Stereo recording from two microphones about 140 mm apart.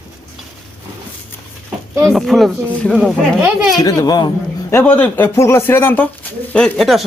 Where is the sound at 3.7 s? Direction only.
25° left (ahead or behind).